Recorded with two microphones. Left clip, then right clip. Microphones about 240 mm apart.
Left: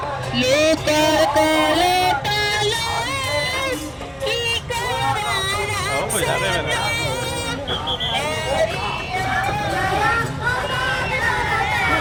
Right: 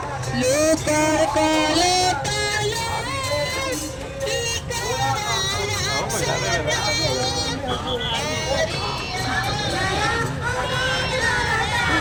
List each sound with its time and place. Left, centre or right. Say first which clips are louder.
0.3 s music: left 2 dB; left
6.7 s vehicle: even; left
8.4 s vehicle: left 3 dB; left
10.8 s music: left 1 dB; left